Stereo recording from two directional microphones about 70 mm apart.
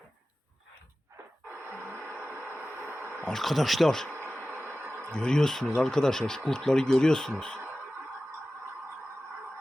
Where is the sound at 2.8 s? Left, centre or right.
Right.